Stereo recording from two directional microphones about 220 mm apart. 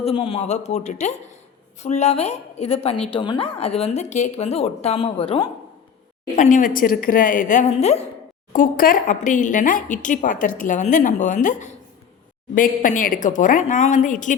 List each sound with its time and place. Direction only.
0.0 s speech: 25° left (ahead or behind)
6.3 s speech: 35° left (ahead or behind)